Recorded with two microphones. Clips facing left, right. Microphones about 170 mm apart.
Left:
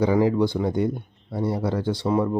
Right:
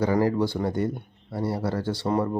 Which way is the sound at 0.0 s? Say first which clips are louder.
Left 3 dB; 15° left (ahead or behind).